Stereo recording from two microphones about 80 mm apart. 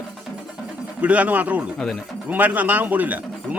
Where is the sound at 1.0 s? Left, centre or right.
Centre.